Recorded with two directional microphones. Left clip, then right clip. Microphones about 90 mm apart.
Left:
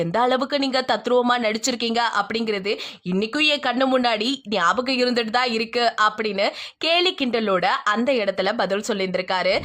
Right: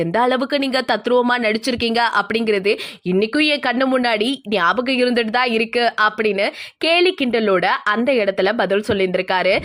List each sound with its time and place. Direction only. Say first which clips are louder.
0.0 s speech: right 3 dB; 25° right (ahead or behind)
1.3 s speech: right 3 dB; 30° right (ahead or behind)
1.9 s speech: right 5 dB; 40° right (ahead or behind)